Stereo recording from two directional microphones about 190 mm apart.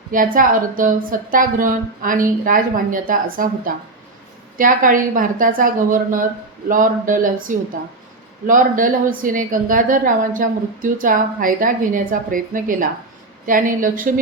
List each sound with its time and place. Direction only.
0.1 s a woman's voice: 45° right (ahead or behind)